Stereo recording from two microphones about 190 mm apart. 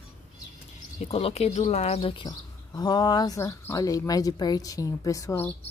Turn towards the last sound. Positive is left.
turn(degrees=15)  # may be behind; listen again after turning